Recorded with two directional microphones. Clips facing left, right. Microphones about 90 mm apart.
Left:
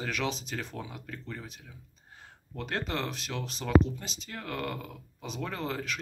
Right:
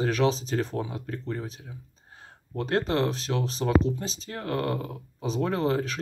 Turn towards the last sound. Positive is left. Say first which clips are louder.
# right 8 dB
turn(degrees=-35)  # may be behind; listen again after turning